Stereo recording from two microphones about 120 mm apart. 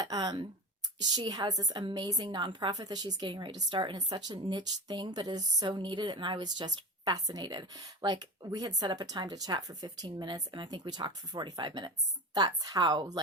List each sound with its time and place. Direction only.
0.0 s a woman's voice: 35° right (ahead or behind)